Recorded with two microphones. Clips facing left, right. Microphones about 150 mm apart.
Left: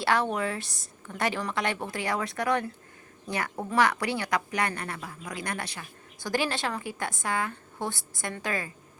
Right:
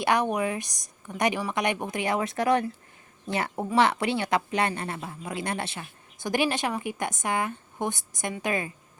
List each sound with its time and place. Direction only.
0.0 s a woman's voice: 15° right (ahead or behind)